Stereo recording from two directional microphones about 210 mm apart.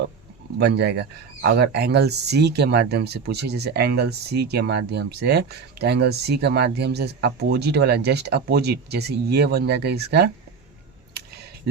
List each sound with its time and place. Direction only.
0.6 s speech: 55° right (ahead or behind)